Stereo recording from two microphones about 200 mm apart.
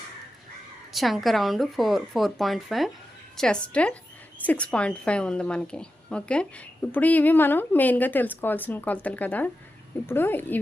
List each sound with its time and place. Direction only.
0.9 s a woman's voice: centre (ahead or behind)